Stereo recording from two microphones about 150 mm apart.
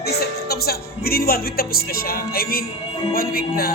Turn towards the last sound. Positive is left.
turn(degrees=80)